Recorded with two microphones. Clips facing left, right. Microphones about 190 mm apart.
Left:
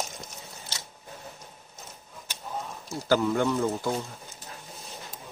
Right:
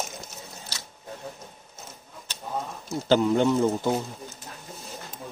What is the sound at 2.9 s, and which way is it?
Speech, 20° right (ahead or behind).